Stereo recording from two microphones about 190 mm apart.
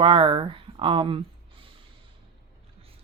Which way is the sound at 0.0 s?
25° right (ahead or behind).